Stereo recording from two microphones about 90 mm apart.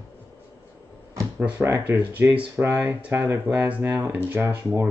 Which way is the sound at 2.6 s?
25° right (ahead or behind).